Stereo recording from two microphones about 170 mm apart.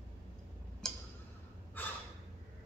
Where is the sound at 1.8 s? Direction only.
10° left (ahead or behind).